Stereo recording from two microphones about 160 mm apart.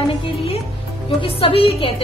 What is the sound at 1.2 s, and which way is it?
Music, 35° left (ahead or behind).